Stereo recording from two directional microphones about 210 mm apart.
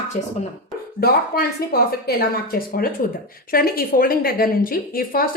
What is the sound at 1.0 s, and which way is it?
A woman's voice, 45° left (ahead or behind).